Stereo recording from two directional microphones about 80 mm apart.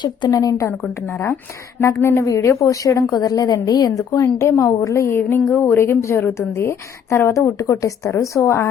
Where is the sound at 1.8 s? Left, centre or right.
Left.